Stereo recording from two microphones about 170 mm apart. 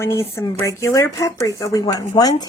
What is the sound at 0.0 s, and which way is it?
Speech, 15° left (ahead or behind).